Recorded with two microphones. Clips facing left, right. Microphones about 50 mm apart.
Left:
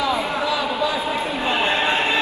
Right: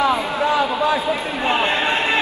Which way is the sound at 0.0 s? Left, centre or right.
Right.